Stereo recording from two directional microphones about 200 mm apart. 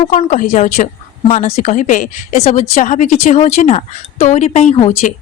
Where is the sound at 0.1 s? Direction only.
35° left (ahead or behind).